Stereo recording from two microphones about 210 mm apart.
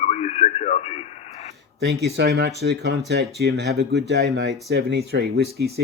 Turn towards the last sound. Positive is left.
turn(degrees=-50)  # may be behind; listen again after turning